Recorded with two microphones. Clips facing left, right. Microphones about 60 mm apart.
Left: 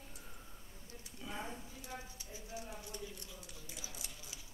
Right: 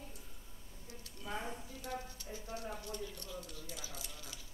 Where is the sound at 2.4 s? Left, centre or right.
Right.